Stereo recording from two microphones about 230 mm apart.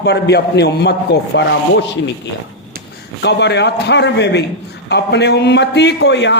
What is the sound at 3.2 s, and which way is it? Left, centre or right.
A man's voice, left.